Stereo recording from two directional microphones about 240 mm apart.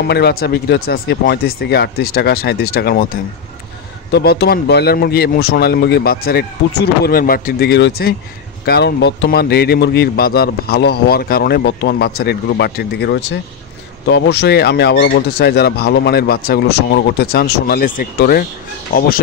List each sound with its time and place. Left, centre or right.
0.1 s a man's voice: left